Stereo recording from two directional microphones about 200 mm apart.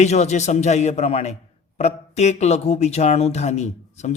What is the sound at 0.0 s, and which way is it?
Speech, 35° left (ahead or behind).